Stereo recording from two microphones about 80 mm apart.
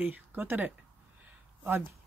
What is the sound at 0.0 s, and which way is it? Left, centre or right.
Speech, right.